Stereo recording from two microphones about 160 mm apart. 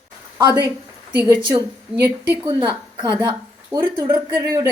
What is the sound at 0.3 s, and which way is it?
A woman's voice, 25° right (ahead or behind).